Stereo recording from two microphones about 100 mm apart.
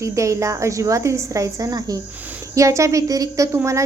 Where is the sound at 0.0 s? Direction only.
30° right (ahead or behind).